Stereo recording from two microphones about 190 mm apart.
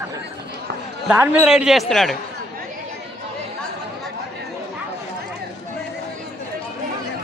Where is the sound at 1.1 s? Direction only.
5° right (ahead or behind).